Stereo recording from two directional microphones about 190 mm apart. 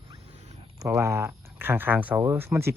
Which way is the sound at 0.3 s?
35° right (ahead or behind).